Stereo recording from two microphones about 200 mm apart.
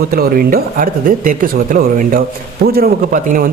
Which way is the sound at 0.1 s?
45° right (ahead or behind).